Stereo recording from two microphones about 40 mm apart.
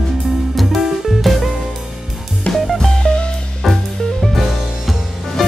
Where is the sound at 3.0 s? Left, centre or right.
Left.